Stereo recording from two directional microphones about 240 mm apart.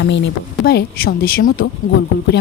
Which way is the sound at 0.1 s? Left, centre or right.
Left.